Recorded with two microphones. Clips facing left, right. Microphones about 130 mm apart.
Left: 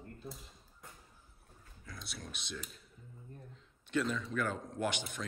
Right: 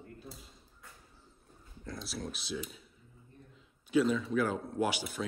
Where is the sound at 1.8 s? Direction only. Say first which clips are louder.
Right 8 dB; centre (ahead or behind).